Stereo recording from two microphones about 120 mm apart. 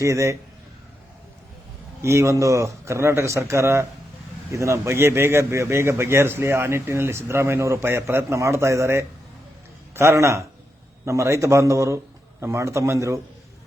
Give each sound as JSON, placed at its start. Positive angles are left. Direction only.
{"t": 0.0, "sound": "a man's voice", "side_deg": -25}
{"t": 2.0, "sound": "a man's voice", "side_deg": -25}